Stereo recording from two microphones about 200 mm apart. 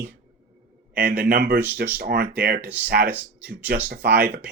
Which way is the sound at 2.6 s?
10° right (ahead or behind).